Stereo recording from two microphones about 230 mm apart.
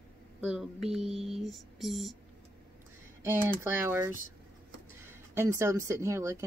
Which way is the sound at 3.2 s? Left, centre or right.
Centre.